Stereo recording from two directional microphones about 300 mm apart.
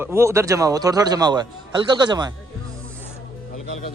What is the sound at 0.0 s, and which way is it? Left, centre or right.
Speech, centre.